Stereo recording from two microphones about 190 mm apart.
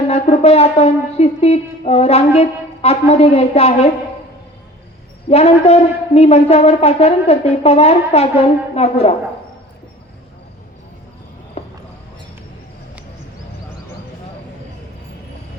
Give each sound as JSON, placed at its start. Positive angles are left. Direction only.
{"t": 0.1, "sound": "speech", "side_deg": 35}
{"t": 5.3, "sound": "speech", "side_deg": 35}
{"t": 11.6, "sound": "a sound", "side_deg": 30}